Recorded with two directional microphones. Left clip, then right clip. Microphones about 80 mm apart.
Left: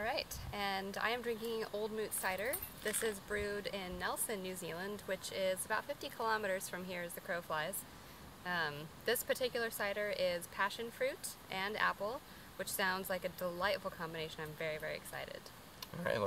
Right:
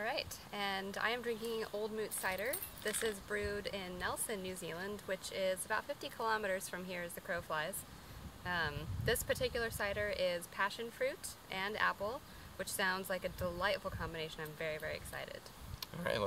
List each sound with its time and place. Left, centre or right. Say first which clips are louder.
0.0 s speech: even; centre
2.8 s speech: even; centre
3.1 s speech: even; centre
15.8 s speech: even; centre